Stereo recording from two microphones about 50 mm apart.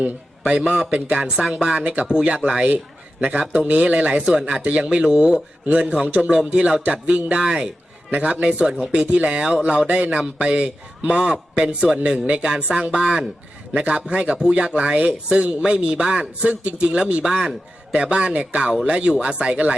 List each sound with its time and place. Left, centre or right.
0.0 s a man's voice: right
1.5 s a man's voice: centre
1.7 s speech: right
4.3 s a man's voice: centre
8.1 s speech: right
9.4 s a man's voice: centre
9.6 s a man's voice: right
17.2 s a man's voice: centre
17.9 s speech: right